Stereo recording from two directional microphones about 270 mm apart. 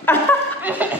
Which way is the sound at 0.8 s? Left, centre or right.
Centre.